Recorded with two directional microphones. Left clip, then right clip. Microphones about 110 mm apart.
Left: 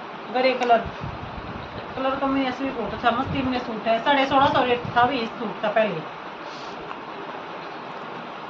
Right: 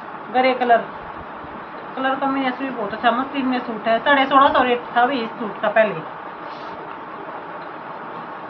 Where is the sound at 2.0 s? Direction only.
20° left (ahead or behind).